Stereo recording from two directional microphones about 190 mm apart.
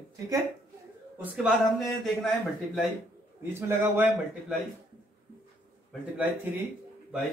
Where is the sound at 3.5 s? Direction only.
10° right (ahead or behind).